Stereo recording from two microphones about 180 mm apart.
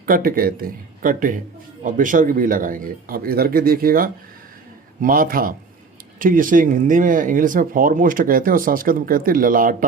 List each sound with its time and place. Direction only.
0.0 s speech: 55° right (ahead or behind)